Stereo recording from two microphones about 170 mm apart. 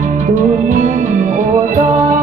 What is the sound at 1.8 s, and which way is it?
Music, 50° right (ahead or behind).